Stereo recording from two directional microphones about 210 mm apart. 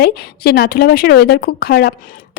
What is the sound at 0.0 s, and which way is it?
Speech, 50° left (ahead or behind).